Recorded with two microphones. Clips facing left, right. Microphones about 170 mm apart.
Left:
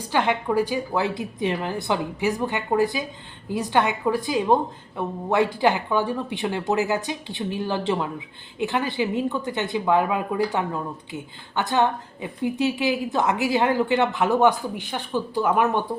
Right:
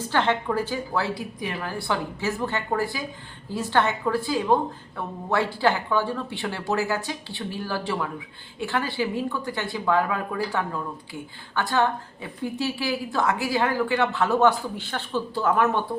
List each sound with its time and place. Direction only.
0.0 s speech: 15° left (ahead or behind)